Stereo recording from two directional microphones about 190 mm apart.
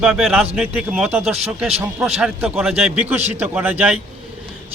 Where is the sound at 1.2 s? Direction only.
35° right (ahead or behind).